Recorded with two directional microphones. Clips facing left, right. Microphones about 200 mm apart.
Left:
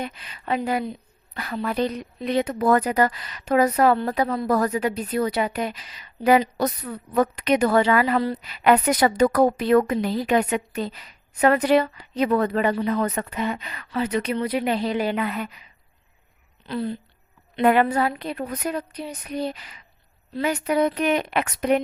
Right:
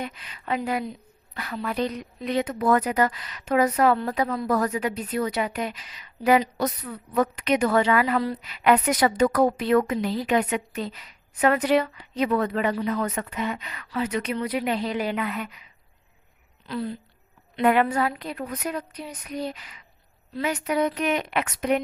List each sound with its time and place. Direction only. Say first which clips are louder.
0.0 s speech: left 2 dB; 30° left (ahead or behind)
16.6 s speech: left 3 dB; 25° left (ahead or behind)